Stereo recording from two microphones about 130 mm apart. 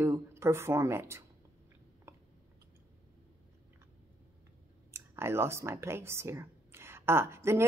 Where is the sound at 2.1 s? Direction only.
20° right (ahead or behind).